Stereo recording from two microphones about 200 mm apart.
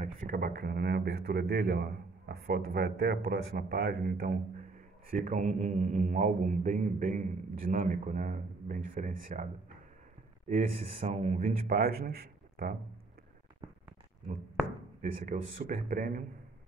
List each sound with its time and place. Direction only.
0.0 s a man's voice: 50° right (ahead or behind)
11.1 s speech: 35° right (ahead or behind); by 12.7 s 50° right (ahead or behind)
15.0 s speech: 45° right (ahead or behind)